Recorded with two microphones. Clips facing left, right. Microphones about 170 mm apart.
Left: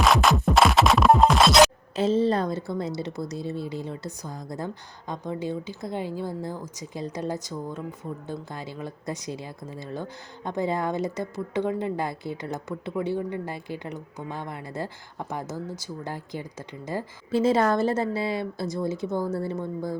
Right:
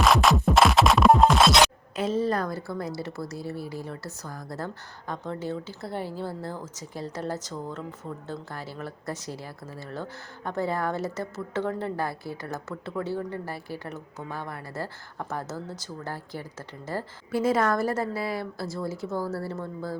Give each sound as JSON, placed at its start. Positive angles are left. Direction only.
{"t": 0.0, "sound": "music", "side_deg": 0}
{"t": 2.0, "sound": "a woman's voice", "side_deg": 25}